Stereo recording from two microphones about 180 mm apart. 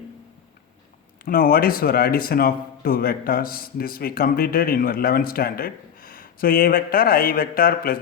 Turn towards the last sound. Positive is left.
turn(degrees=55)  # may be behind; listen again after turning